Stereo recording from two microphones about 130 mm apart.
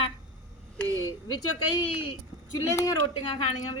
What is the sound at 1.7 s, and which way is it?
Speech, 40° left (ahead or behind).